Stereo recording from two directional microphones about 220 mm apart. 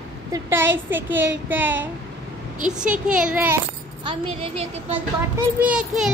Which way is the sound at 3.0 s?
5° right (ahead or behind).